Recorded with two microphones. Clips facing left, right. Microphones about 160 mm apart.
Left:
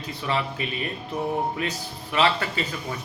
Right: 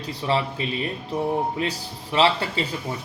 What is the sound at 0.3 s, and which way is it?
Speech, 30° right (ahead or behind).